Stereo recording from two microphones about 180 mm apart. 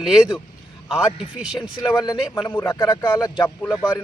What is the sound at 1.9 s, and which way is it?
Speech, 25° left (ahead or behind).